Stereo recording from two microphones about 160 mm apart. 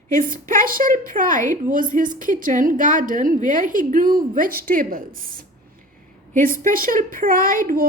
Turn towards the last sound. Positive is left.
turn(degrees=-60)  # may be behind; listen again after turning